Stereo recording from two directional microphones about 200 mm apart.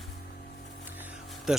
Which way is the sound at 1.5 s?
5° right (ahead or behind).